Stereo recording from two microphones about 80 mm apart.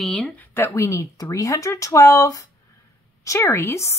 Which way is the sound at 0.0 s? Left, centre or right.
Centre.